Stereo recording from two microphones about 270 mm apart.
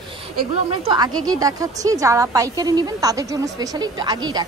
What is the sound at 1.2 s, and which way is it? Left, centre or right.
Speech, centre.